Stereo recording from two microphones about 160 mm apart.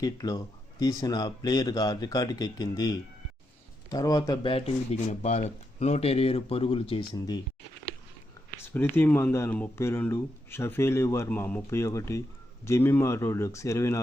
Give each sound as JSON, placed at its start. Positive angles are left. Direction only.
{"t": 0.0, "sound": "speech", "side_deg": 25}
{"t": 4.5, "sound": "speech", "side_deg": 40}
{"t": 8.5, "sound": "speech", "side_deg": 15}